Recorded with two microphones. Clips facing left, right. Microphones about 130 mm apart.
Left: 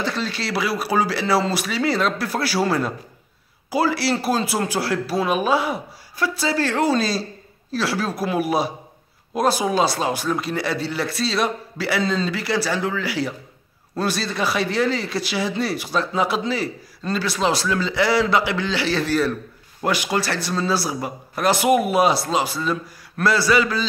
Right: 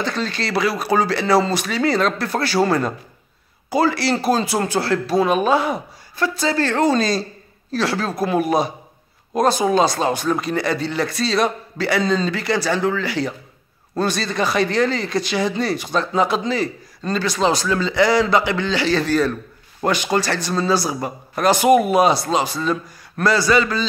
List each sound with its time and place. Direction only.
0.0 s a man's voice: 5° left (ahead or behind)